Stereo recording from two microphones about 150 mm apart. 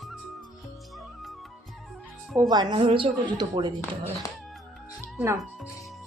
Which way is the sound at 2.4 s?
30° right (ahead or behind).